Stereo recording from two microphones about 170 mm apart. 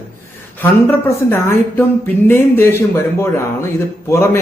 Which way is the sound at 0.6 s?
10° left (ahead or behind).